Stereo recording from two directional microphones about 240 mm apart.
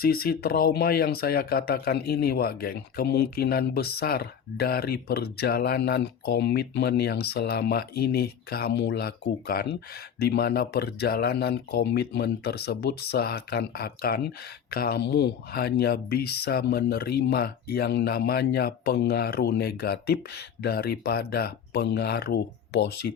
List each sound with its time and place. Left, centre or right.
0.0 s speech: left